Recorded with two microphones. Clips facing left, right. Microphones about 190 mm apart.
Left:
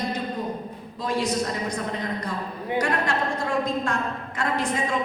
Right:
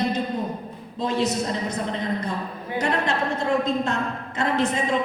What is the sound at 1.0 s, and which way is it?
Speech, 20° right (ahead or behind).